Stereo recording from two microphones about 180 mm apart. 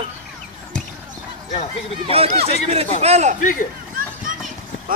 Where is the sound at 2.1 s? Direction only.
35° right (ahead or behind).